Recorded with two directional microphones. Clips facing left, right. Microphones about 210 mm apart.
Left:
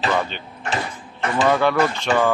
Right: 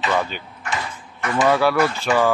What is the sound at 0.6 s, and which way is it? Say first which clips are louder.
Mechanisms: left 3 dB; 35° left (ahead or behind).